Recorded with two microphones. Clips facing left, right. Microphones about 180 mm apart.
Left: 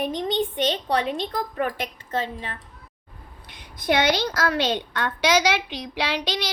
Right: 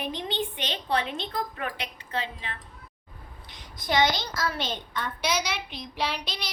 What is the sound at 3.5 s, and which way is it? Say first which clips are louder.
A woman's voice: left 6 dB; 60° left (ahead or behind).